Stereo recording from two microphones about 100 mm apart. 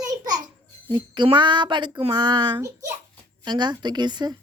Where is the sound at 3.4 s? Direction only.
45° right (ahead or behind).